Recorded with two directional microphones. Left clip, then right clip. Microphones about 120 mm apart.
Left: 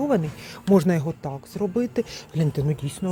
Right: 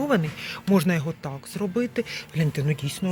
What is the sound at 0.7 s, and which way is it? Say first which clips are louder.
Speech: left 4 dB; 50° left (ahead or behind).